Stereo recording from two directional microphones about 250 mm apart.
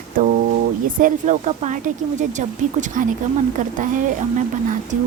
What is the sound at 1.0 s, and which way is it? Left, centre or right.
A woman's voice, right.